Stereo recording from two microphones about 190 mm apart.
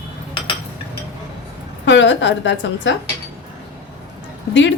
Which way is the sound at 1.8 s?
70° left (ahead or behind).